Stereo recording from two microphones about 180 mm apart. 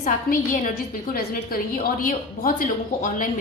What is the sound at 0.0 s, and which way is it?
A woman's voice, 45° left (ahead or behind).